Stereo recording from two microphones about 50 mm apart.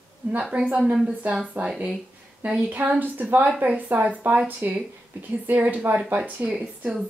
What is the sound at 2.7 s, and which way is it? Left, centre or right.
Speech, right.